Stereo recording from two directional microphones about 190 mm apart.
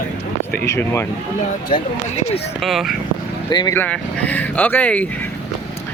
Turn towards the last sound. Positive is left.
turn(degrees=10)  # may be behind; listen again after turning